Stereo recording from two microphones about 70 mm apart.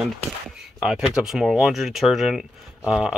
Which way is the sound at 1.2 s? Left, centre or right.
Centre.